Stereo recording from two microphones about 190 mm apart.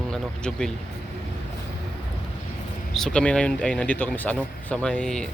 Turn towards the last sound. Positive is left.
turn(degrees=5)  # may be behind; listen again after turning